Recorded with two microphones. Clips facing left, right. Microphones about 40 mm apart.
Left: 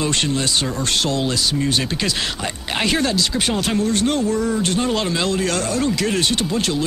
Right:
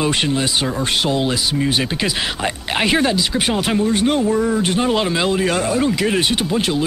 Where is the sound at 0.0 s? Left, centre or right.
Centre.